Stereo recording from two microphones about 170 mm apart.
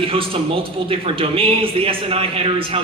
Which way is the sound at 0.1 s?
30° right (ahead or behind).